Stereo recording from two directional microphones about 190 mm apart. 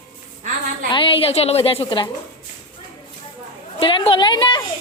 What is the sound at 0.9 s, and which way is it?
A woman's voice, 30° left (ahead or behind).